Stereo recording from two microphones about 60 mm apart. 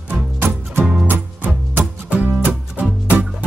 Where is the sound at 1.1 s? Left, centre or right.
Right.